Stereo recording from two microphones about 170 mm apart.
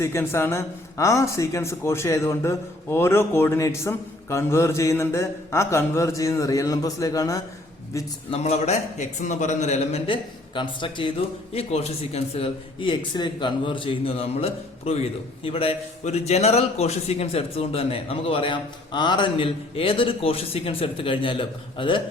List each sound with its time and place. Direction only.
0.0 s speech: 15° left (ahead or behind)
8.3 s a man's voice: 40° left (ahead or behind)